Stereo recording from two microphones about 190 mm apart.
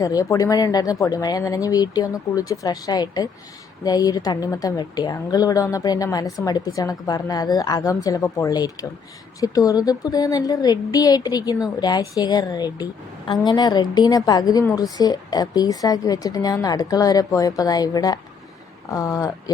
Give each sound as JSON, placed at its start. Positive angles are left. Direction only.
{"t": 0.0, "sound": "a woman's voice", "side_deg": 20}